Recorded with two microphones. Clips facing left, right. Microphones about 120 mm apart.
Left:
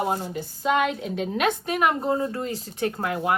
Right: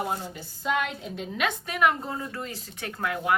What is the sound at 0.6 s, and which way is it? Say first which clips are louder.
Speech: left 5 dB; 70° left (ahead or behind).